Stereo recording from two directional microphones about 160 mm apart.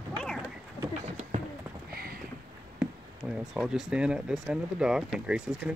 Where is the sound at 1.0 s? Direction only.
40° right (ahead or behind).